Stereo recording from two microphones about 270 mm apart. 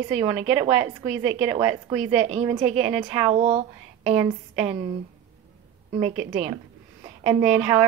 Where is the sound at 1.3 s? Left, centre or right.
Centre.